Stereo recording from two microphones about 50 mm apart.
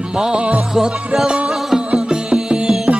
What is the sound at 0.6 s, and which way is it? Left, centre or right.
Music, centre.